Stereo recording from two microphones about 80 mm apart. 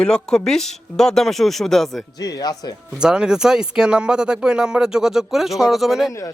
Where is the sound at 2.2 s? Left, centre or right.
Left.